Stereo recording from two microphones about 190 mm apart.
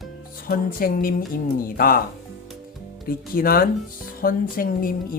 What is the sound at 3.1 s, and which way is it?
Speech, 50° left (ahead or behind).